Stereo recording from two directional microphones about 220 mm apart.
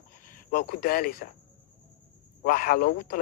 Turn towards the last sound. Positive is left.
turn(degrees=45)  # may be behind; listen again after turning